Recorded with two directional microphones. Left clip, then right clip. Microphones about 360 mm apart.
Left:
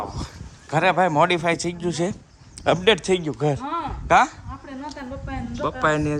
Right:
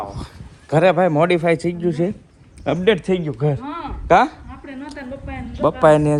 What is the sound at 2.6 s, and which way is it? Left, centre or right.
Speech, centre.